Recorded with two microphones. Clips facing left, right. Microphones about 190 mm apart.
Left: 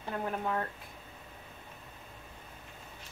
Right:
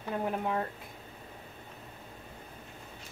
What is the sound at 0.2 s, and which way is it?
Speech, 15° right (ahead or behind).